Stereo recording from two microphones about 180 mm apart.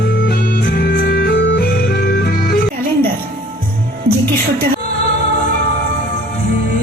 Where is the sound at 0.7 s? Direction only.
65° left (ahead or behind).